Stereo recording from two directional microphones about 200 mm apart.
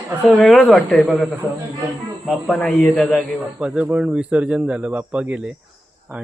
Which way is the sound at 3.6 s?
5° right (ahead or behind).